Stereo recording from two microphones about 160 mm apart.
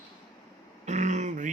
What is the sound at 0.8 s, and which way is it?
Throat clearing, 50° right (ahead or behind).